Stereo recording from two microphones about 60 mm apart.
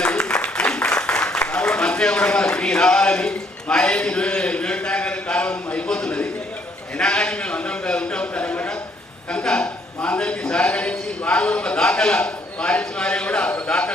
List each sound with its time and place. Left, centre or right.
0.0 s applause: centre
7.0 s a man's voice: centre